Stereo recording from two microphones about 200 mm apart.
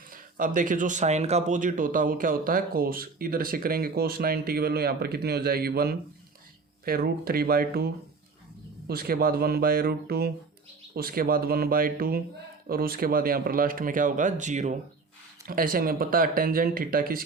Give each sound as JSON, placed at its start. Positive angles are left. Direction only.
{"t": 0.1, "sound": "speech", "side_deg": -40}